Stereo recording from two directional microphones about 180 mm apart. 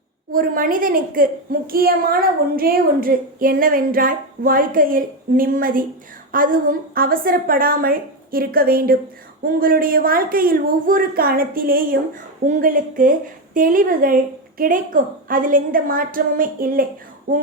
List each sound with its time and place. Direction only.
0.3 s speech: 50° right (ahead or behind)